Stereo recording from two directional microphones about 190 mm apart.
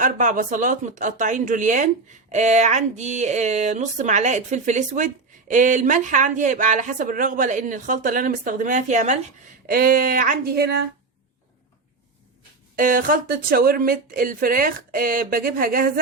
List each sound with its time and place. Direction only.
0.0 s speech: 45° right (ahead or behind)
12.7 s speech: 45° right (ahead or behind)